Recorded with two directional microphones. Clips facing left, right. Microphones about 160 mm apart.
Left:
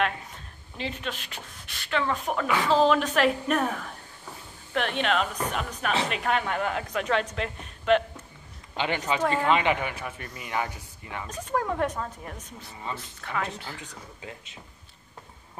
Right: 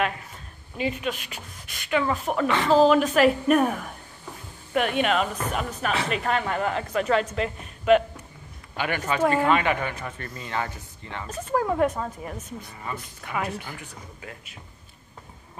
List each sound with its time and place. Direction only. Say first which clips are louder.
0.7 s speech: right 6 dB; 10° right (ahead or behind)
2.4 s speech: right 3 dB; 10° left (ahead or behind)
2.8 s a woman's voice: right 6 dB; 5° right (ahead or behind)
8.7 s speech: right 1 dB; 20° left (ahead or behind)
9.2 s speech: right 6 dB; 10° right (ahead or behind)
9.5 s speech: right 1 dB; 20° left (ahead or behind)
11.2 s speech: right 4 dB; 5° right (ahead or behind)
13.7 s speech: right 1 dB; 20° left (ahead or behind)